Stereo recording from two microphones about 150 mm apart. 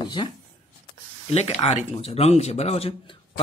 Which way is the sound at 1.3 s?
45° left (ahead or behind).